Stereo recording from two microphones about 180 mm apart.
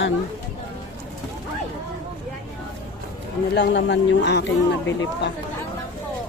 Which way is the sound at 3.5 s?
75° left (ahead or behind).